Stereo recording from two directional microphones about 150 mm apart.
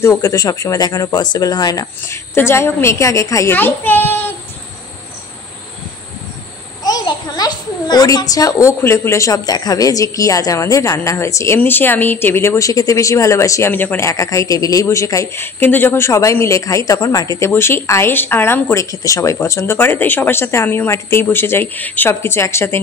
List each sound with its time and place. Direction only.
0.0 s a child's voice: 20° left (ahead or behind)
6.8 s a child's voice: 25° left (ahead or behind)